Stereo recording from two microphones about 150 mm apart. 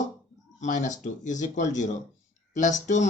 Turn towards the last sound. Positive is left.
turn(degrees=55)  # may be behind; listen again after turning